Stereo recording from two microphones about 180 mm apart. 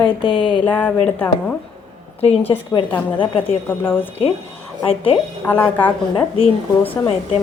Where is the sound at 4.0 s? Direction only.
30° left (ahead or behind).